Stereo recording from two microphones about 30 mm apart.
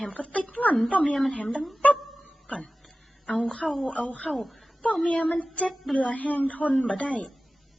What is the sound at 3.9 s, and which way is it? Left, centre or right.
Speech, left.